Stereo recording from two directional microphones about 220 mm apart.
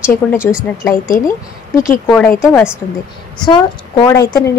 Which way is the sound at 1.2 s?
15° left (ahead or behind).